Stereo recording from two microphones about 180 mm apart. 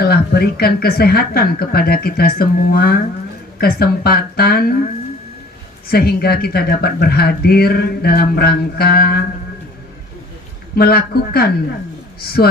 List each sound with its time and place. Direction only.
0.0 s speech: 60° left (ahead or behind)
5.9 s speech: 60° left (ahead or behind)
10.8 s speech: 60° left (ahead or behind)